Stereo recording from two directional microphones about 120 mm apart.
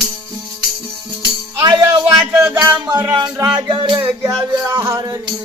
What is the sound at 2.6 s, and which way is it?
Music, 35° right (ahead or behind).